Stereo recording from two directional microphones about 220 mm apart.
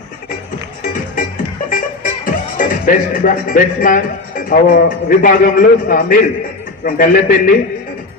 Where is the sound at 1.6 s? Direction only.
40° left (ahead or behind).